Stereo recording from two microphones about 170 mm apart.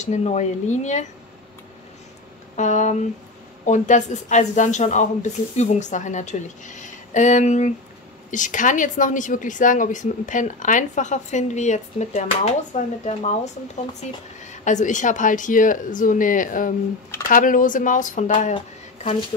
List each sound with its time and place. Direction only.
0.0 s a woman's voice: 40° left (ahead or behind)
2.5 s a woman's voice: 45° left (ahead or behind)
14.5 s a woman's voice: 45° left (ahead or behind)